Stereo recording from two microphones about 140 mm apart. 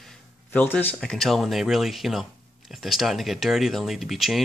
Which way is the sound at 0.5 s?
10° left (ahead or behind).